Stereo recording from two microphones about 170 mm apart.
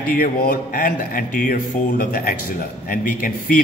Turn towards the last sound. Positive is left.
turn(degrees=55)  # may be behind; listen again after turning